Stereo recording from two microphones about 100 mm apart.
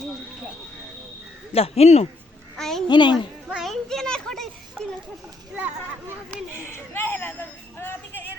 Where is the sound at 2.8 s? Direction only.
50° left (ahead or behind).